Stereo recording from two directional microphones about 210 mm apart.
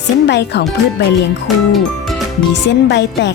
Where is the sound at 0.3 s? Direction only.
55° left (ahead or behind).